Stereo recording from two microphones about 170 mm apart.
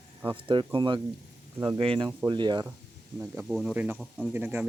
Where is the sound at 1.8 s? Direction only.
30° right (ahead or behind).